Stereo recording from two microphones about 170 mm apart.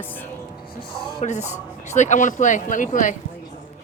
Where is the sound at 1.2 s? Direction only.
40° left (ahead or behind).